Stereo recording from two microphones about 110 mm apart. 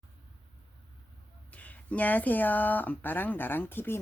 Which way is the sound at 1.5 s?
15° left (ahead or behind).